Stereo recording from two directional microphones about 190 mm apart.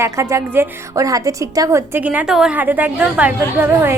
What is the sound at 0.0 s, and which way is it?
A woman's voice, 15° right (ahead or behind).